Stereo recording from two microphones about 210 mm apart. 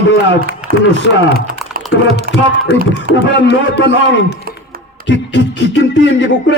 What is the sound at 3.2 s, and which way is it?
A man's voice, 55° left (ahead or behind).